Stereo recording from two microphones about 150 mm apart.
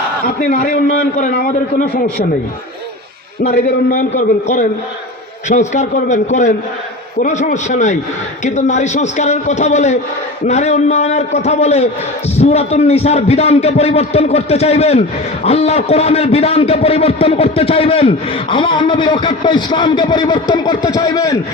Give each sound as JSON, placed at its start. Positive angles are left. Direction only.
{"t": 0.3, "sound": "a man's voice", "side_deg": 70}
{"t": 3.4, "sound": "a man's voice", "side_deg": 55}